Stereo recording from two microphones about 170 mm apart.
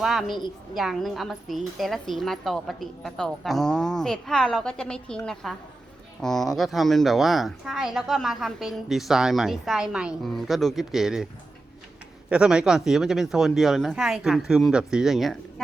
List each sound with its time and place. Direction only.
0.0 s speech: centre (ahead or behind)
0.3 s a woman's voice: 25° left (ahead or behind)
0.8 s speech: centre (ahead or behind)
12.3 s speech: 5° right (ahead or behind)